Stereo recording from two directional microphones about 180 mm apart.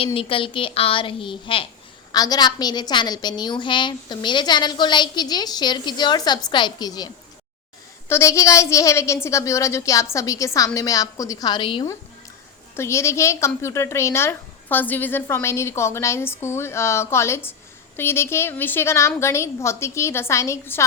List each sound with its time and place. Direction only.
0.0 s a woman's voice: 30° left (ahead or behind)
8.1 s a woman's voice: 15° left (ahead or behind)
12.7 s a woman's voice: 15° left (ahead or behind)